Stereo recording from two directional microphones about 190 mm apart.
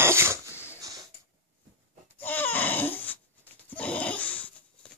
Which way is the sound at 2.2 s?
10° left (ahead or behind).